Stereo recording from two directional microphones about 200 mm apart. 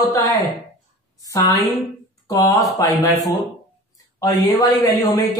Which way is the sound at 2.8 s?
15° left (ahead or behind).